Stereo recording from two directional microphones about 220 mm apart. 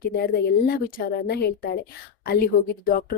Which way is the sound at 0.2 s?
45° left (ahead or behind).